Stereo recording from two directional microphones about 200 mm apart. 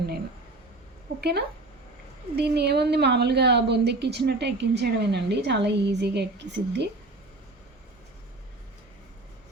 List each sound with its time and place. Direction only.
1.2 s a woman's voice: 55° right (ahead or behind)